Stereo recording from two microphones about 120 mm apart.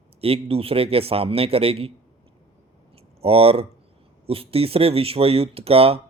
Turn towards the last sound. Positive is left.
turn(degrees=-55)  # may be behind; listen again after turning